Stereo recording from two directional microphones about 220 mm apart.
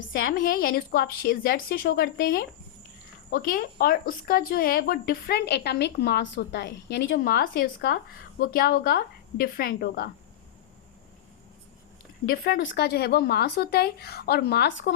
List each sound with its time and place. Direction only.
0.3 s speech: 40° left (ahead or behind)
12.5 s speech: 55° left (ahead or behind)